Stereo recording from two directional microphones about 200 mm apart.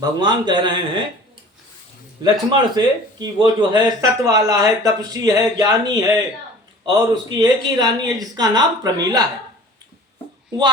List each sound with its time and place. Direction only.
0.0 s speech: 20° right (ahead or behind)
2.2 s speech: 20° right (ahead or behind)